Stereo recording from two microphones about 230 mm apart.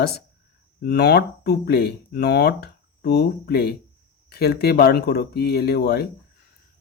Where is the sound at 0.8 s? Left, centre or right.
Left.